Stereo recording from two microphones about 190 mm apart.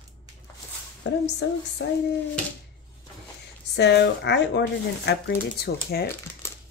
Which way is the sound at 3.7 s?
65° left (ahead or behind).